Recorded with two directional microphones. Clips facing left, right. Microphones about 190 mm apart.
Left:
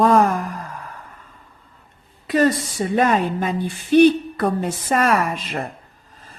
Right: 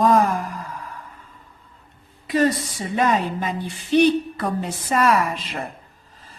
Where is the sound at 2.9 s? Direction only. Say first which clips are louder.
Left 2 dB; 50° left (ahead or behind).